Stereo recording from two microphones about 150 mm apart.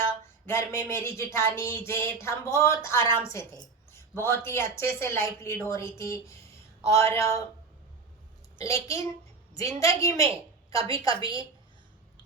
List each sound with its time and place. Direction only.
0.0 s a sound: 15° left (ahead or behind)
2.2 s a woman's voice: 20° left (ahead or behind)
8.6 s a woman's voice: 20° left (ahead or behind)